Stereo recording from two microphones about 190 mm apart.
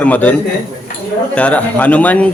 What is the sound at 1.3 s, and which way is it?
Speech, 5° left (ahead or behind).